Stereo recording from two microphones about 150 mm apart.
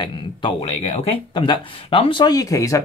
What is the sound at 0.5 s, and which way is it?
Speech, 45° left (ahead or behind).